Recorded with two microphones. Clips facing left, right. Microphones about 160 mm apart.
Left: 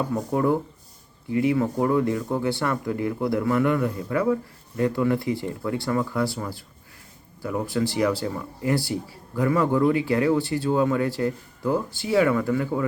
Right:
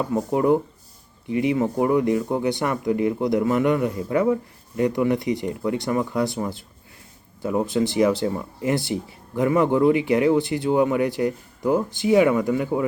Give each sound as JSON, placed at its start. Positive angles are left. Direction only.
{"t": 0.1, "sound": "speech", "side_deg": -20}